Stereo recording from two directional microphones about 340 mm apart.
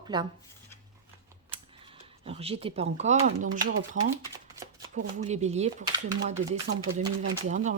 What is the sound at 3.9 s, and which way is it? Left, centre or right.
Speech, right.